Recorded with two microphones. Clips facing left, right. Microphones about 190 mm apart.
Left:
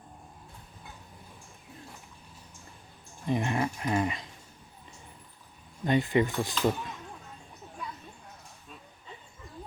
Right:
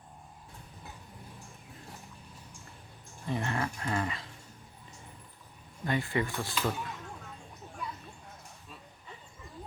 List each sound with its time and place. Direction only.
3.2 s speech: 15° left (ahead or behind)
5.8 s speech: 20° left (ahead or behind)